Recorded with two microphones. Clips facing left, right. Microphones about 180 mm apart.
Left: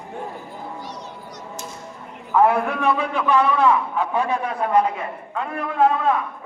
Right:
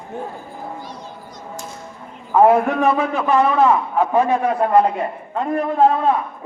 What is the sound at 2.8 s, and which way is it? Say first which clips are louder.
A man's voice: right 4 dB; 45° right (ahead or behind).